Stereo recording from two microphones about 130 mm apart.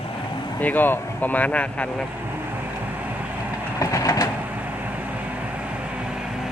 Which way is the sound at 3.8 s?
25° left (ahead or behind).